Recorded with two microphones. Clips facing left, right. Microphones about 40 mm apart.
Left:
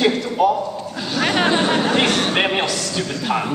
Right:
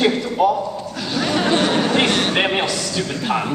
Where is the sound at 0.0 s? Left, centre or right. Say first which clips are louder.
Even; centre.